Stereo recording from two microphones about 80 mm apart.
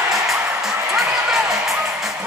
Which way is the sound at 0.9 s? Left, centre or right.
Centre.